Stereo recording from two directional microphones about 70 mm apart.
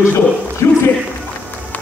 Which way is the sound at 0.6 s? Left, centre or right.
Left.